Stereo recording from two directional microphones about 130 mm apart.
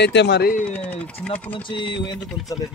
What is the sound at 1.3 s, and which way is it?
Speech, 40° left (ahead or behind).